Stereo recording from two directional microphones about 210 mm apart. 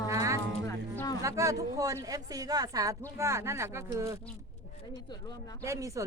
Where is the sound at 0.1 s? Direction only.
15° right (ahead or behind).